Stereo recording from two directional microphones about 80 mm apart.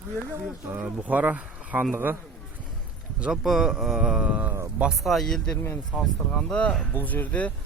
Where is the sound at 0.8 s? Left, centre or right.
Centre.